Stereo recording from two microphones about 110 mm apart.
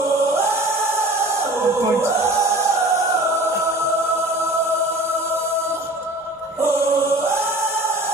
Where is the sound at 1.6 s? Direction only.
25° right (ahead or behind).